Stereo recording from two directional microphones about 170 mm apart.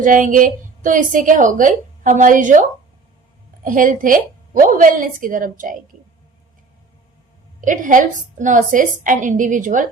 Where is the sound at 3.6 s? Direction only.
50° right (ahead or behind).